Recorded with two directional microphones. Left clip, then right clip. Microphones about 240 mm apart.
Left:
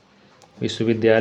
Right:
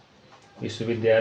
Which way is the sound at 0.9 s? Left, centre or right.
Left.